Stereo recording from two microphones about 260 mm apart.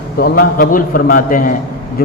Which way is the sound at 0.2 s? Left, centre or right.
Left.